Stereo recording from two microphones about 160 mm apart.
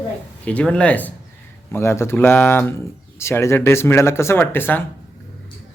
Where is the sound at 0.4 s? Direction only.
5° left (ahead or behind).